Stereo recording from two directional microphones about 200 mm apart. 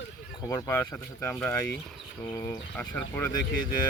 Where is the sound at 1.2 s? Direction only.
10° left (ahead or behind).